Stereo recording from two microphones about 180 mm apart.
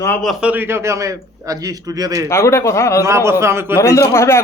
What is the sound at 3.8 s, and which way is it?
Speech, 15° left (ahead or behind).